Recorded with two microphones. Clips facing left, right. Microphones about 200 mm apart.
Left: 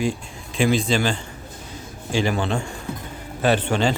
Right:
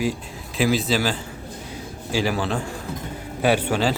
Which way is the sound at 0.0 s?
5° right (ahead or behind).